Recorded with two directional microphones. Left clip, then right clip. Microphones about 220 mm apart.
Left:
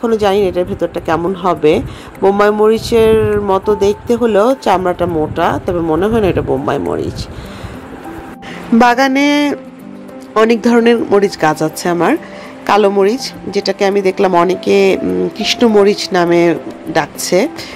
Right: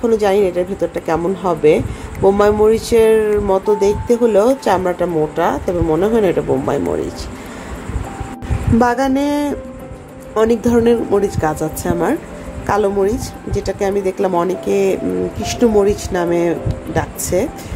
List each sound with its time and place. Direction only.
0.0 s a woman's voice: 20° left (ahead or behind)
8.7 s a woman's voice: 20° left (ahead or behind)